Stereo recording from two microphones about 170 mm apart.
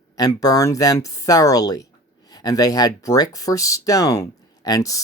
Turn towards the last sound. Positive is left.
turn(degrees=20)  # may be behind; listen again after turning